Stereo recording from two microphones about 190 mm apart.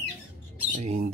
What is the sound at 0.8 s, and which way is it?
Speech, 35° right (ahead or behind).